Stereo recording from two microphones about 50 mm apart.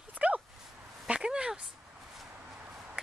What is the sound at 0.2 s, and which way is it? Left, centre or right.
Dog, right.